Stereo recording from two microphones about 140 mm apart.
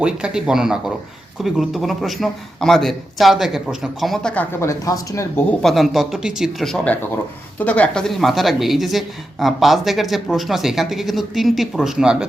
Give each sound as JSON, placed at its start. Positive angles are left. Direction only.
{"t": 0.0, "sound": "a woman's voice", "side_deg": -5}
{"t": 4.6, "sound": "speech", "side_deg": 25}
{"t": 5.5, "sound": "a woman's voice", "side_deg": 0}